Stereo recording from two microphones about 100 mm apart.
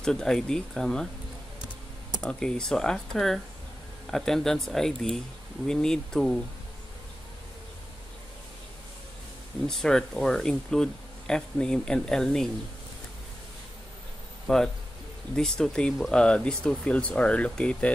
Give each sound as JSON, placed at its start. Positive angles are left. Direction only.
{"t": 0.0, "sound": "speech", "side_deg": 5}
{"t": 2.2, "sound": "speech", "side_deg": 5}
{"t": 9.7, "sound": "speech", "side_deg": 5}
{"t": 14.5, "sound": "speech", "side_deg": 10}